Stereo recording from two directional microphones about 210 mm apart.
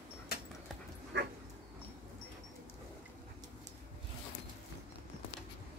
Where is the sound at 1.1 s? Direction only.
55° right (ahead or behind).